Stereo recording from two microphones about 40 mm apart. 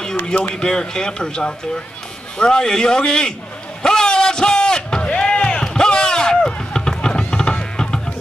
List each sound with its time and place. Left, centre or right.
0.6 s a man's voice: centre
3.8 s a sound: centre
5.6 s run: centre
7.0 s music: centre